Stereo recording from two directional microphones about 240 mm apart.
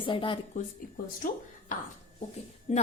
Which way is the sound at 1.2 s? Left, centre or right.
Left.